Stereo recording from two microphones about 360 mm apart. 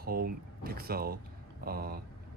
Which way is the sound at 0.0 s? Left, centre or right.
Right.